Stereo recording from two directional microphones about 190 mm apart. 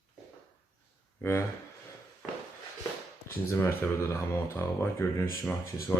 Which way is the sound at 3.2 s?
15° left (ahead or behind).